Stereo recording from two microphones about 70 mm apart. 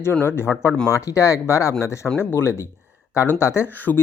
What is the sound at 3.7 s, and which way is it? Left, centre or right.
Speech, left.